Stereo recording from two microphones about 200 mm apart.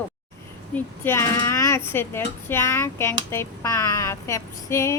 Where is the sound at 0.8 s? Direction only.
10° left (ahead or behind).